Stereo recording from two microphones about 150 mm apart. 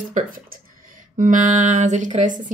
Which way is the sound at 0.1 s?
70° right (ahead or behind).